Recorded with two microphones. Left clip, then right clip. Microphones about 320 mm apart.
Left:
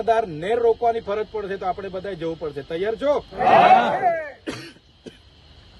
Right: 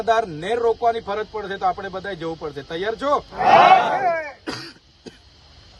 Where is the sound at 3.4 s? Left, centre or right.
Right.